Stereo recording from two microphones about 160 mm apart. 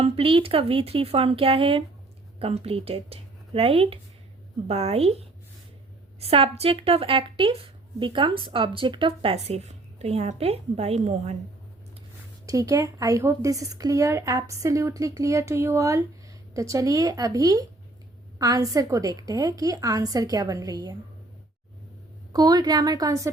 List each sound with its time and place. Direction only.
0.0 s speech: 35° right (ahead or behind)
12.5 s speech: 20° right (ahead or behind)
22.3 s speech: 25° right (ahead or behind)